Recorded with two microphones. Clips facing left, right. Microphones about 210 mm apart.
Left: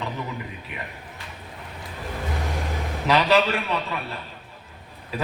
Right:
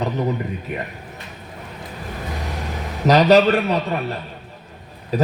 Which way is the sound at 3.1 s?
40° right (ahead or behind).